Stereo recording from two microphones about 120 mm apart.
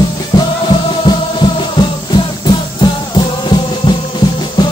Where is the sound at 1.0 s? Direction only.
40° left (ahead or behind).